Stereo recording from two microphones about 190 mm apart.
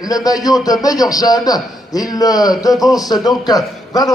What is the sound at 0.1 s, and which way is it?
A man's voice, 20° left (ahead or behind).